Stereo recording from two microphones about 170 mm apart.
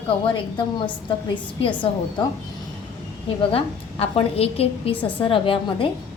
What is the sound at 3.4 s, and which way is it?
A woman's voice, 35° left (ahead or behind).